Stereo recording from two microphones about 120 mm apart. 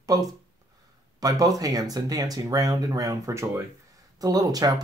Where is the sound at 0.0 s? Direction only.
30° right (ahead or behind).